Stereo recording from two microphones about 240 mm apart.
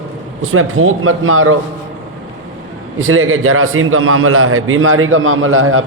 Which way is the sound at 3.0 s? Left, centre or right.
Right.